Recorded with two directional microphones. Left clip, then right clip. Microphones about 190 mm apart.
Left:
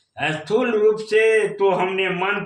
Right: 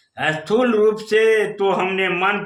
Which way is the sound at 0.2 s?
30° right (ahead or behind).